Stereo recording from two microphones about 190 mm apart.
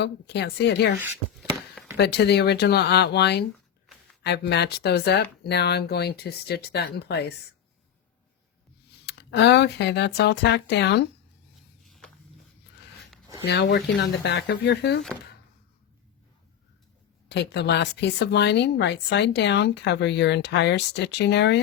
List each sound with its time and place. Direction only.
0.0 s speech: 60° left (ahead or behind)
1.4 s chop: 5° right (ahead or behind)
2.0 s speech: 60° left (ahead or behind)
9.0 s speech: 65° left (ahead or behind)
11.9 s walk: centre (ahead or behind)
13.4 s speech: 65° left (ahead or behind)
17.2 s speech: 65° left (ahead or behind)